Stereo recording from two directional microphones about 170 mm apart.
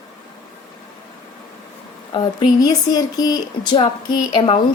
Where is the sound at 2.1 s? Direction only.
25° left (ahead or behind).